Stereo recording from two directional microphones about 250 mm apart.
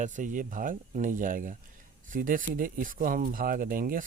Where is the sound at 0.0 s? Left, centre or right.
Right.